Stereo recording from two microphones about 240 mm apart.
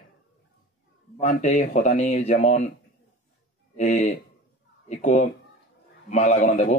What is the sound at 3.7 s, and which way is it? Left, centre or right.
A man's voice, left.